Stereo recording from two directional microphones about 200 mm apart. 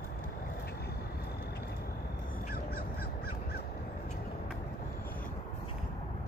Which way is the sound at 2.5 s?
50° left (ahead or behind).